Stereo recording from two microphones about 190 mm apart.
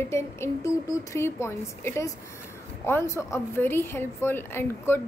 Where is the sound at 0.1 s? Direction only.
15° left (ahead or behind).